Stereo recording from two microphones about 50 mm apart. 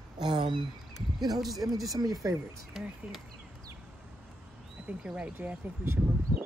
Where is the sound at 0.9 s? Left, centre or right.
Centre.